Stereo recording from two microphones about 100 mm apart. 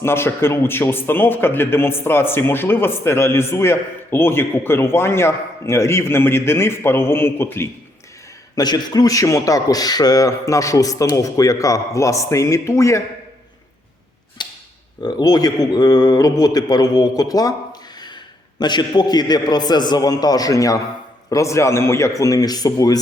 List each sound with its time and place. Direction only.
0.0 s a man's voice: 25° left (ahead or behind)
8.5 s a man's voice: 45° left (ahead or behind)
14.4 s a sound: 50° left (ahead or behind)
15.0 s a man's voice: 40° left (ahead or behind)